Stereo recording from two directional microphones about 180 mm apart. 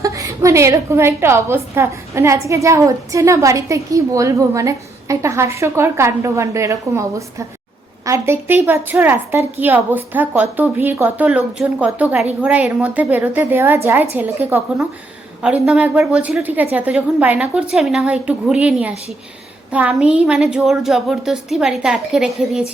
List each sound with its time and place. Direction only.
0.0 s a woman's voice: 15° right (ahead or behind)